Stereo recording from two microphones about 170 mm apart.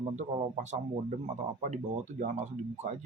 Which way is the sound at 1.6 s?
45° right (ahead or behind).